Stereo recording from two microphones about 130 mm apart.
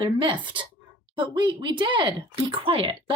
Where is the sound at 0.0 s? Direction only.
40° right (ahead or behind).